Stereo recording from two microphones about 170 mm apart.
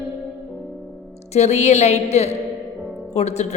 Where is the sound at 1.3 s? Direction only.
40° left (ahead or behind).